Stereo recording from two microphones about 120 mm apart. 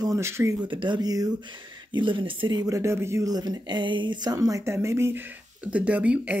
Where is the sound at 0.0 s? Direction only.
25° right (ahead or behind).